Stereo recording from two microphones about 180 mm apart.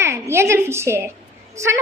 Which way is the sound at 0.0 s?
15° right (ahead or behind).